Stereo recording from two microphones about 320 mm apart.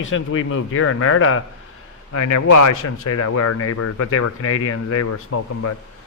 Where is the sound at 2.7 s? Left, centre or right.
Left.